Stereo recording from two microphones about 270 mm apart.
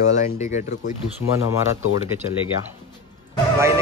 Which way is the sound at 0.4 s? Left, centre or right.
Left.